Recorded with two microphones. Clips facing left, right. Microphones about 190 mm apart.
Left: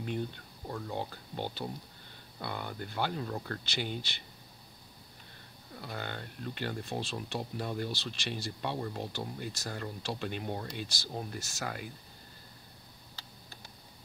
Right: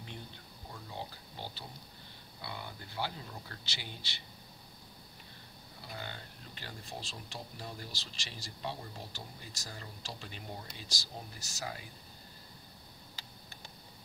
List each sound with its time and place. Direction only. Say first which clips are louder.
0.7 s speech: left 8 dB; 60° left (ahead or behind)
5.8 s speech: left 6 dB; 60° left (ahead or behind)